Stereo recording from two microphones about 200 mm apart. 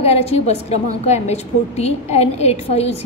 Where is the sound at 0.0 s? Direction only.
30° left (ahead or behind).